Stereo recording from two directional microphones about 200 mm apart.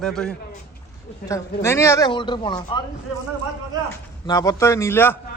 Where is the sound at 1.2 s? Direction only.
15° left (ahead or behind).